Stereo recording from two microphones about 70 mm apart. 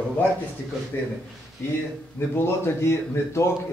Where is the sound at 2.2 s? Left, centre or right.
Left.